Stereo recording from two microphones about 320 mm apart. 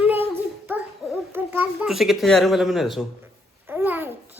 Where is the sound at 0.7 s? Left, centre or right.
Centre.